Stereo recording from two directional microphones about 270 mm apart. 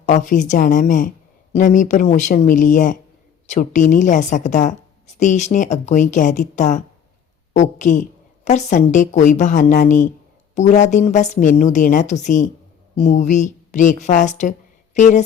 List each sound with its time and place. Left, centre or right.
0.0 s a woman's voice: left